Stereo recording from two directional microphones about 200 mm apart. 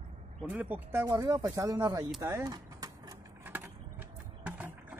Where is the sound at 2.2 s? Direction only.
15° right (ahead or behind).